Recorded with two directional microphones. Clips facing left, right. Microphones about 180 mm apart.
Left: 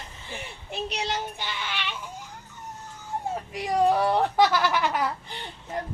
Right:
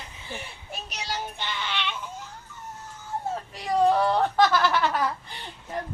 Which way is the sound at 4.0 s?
15° left (ahead or behind).